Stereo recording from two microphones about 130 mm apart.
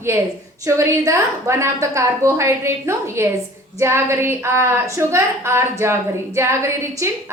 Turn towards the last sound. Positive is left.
turn(degrees=-20)  # may be behind; listen again after turning